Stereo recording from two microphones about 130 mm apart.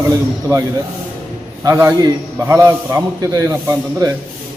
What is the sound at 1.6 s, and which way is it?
A man's voice, 25° right (ahead or behind).